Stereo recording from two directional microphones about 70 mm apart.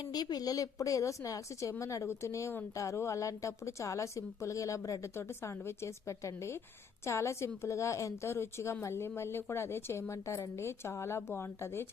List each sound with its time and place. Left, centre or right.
0.0 s a woman's voice: left